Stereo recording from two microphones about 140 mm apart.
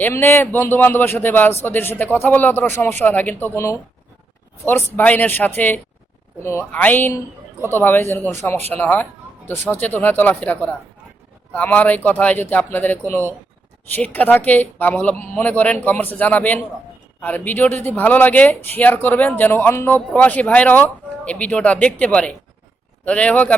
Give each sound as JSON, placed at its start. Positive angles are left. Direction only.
{"t": 0.0, "sound": "speech", "side_deg": 15}